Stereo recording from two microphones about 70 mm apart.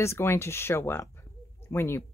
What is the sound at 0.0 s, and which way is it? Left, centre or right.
Speech, left.